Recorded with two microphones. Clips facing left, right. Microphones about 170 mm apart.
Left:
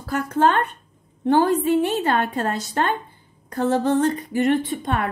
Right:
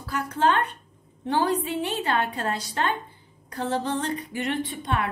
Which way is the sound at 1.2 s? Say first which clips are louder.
Left 7 dB; 50° left (ahead or behind).